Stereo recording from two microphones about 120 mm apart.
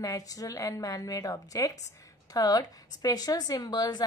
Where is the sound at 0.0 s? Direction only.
30° left (ahead or behind).